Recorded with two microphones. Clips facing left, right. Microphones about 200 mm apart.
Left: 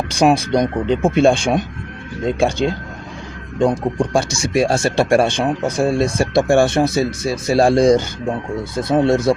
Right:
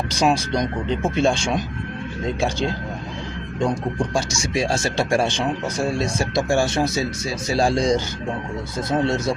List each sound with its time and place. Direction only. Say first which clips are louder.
0.1 s speech: left 6 dB; 55° left (ahead or behind)
3.6 s speech: left 6 dB; 55° left (ahead or behind)